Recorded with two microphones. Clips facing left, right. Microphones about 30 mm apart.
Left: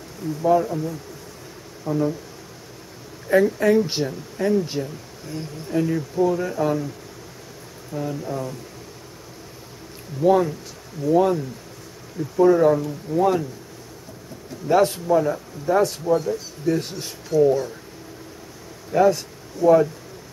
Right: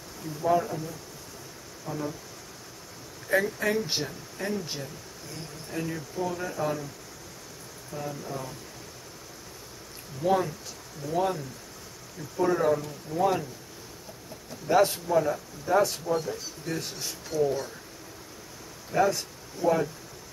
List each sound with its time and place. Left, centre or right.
0.5 s speech: centre
1.9 s speech: centre
3.3 s speech: centre
7.9 s speech: centre
10.2 s speech: centre
14.7 s speech: centre
18.9 s speech: centre